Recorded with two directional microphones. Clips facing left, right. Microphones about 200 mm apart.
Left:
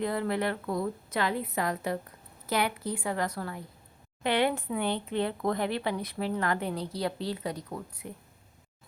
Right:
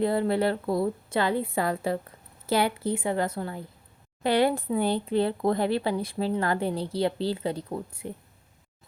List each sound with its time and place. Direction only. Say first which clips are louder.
0.0 s a woman's voice: right 5 dB; 30° right (ahead or behind)
4.2 s speech: right 4 dB; 35° right (ahead or behind)